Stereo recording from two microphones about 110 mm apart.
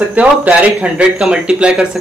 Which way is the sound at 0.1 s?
15° right (ahead or behind).